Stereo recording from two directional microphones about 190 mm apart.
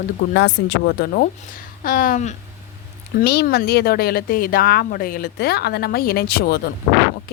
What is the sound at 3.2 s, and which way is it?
Speech, 55° left (ahead or behind).